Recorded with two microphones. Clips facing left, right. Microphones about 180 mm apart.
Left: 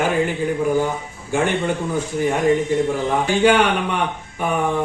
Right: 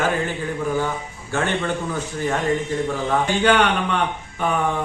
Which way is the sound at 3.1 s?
10° left (ahead or behind).